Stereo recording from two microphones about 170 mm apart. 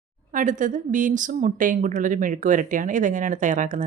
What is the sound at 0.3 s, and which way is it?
Speech, 50° right (ahead or behind).